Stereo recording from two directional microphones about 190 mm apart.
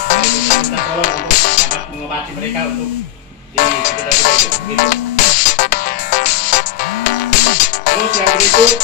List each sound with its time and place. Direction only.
0.0 s music: 40° left (ahead or behind)
3.5 s music: 40° left (ahead or behind)